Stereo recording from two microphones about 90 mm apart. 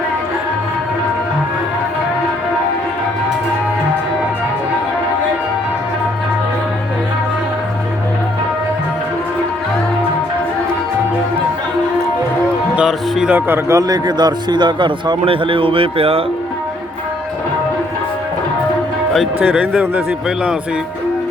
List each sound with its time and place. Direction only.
12.7 s music: 10° right (ahead or behind)
13.3 s speech: 25° right (ahead or behind)
13.7 s speech: 45° right (ahead or behind)
15.2 s speech: 85° right
19.4 s a man's voice: 15° right (ahead or behind)